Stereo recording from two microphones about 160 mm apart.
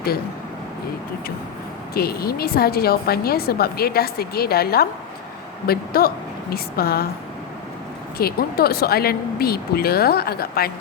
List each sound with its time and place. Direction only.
1.9 s a woman's voice: 70° left (ahead or behind)
8.2 s a woman's voice: 70° left (ahead or behind)